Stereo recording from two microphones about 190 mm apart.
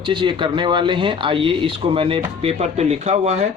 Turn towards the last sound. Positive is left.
turn(degrees=-35)  # may be behind; listen again after turning